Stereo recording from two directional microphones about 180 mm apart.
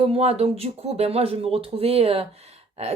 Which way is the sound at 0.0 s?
35° right (ahead or behind).